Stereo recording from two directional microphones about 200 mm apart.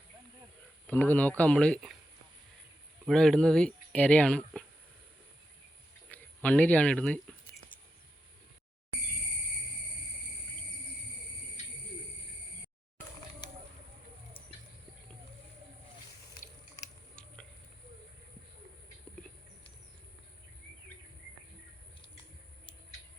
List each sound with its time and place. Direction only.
0.9 s speech: 10° left (ahead or behind)
3.1 s speech: centre (ahead or behind)
6.1 s speech: 5° left (ahead or behind)
11.6 s bird: 30° left (ahead or behind)